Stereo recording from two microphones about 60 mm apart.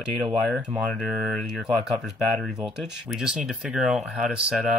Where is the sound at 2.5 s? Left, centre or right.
Centre.